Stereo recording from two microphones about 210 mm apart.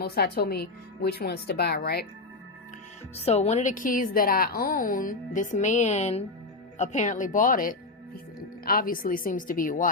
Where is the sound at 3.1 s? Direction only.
30° left (ahead or behind).